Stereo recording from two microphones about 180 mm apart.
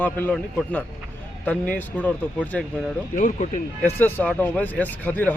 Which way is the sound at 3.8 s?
10° left (ahead or behind).